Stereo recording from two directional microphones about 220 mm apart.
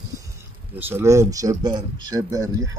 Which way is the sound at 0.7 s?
10° right (ahead or behind).